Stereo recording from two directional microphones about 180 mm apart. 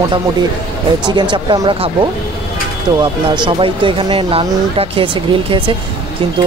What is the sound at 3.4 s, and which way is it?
Speech, 30° right (ahead or behind).